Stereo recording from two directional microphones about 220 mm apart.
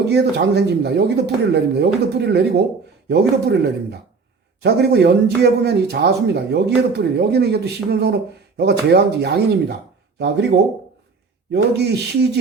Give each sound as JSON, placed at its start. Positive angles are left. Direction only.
{"t": 0.0, "sound": "speech", "side_deg": -50}
{"t": 11.5, "sound": "speech", "side_deg": -50}